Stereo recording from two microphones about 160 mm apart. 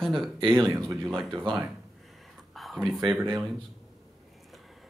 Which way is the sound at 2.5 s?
Centre (ahead or behind).